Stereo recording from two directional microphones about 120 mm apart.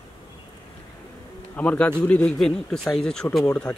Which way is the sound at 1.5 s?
10° left (ahead or behind).